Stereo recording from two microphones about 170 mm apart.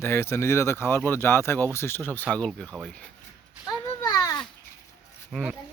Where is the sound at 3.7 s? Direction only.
25° left (ahead or behind).